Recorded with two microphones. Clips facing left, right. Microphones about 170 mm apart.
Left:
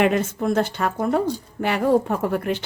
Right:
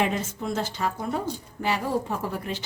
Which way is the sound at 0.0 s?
60° left (ahead or behind).